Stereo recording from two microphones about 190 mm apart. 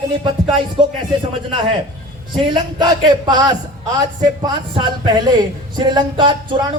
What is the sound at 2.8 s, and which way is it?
Speech, 20° right (ahead or behind).